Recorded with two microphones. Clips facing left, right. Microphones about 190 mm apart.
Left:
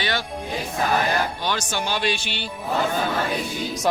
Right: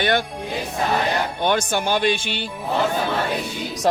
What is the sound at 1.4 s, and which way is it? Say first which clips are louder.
Speech: right 6 dB; 55° right (ahead or behind).